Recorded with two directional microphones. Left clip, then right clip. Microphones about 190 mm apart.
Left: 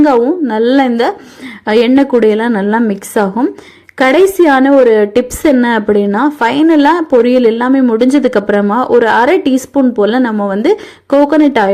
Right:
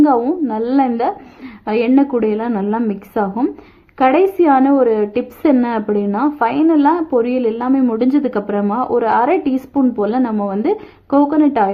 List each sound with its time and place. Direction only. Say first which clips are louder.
0.0 s a woman's voice: left 5 dB; 20° left (ahead or behind)